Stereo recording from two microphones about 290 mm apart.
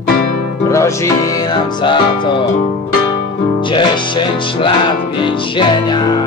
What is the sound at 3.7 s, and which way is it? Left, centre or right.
Music, centre.